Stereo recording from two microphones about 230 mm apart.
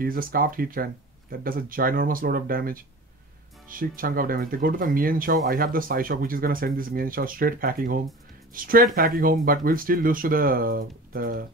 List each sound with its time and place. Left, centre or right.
0.0 s speech: right